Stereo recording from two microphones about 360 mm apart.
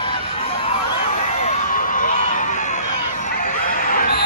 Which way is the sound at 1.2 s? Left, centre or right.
Left.